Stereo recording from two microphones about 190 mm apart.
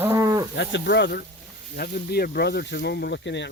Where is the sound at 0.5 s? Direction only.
65° left (ahead or behind).